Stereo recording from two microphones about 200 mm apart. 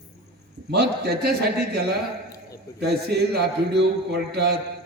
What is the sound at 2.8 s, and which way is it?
A man's voice, 55° right (ahead or behind).